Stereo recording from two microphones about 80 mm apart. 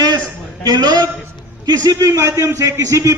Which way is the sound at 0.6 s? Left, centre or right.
Right.